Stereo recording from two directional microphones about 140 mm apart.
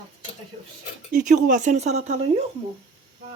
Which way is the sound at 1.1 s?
65° right (ahead or behind).